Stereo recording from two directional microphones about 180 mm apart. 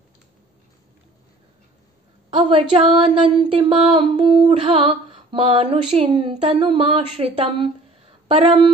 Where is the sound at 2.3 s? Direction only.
30° right (ahead or behind).